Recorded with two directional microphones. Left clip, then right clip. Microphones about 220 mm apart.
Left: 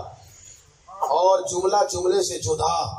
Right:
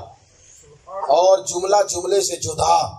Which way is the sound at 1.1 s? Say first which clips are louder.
Right 4 dB; 45° right (ahead or behind).